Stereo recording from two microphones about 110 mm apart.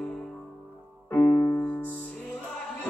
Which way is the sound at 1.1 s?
20° left (ahead or behind).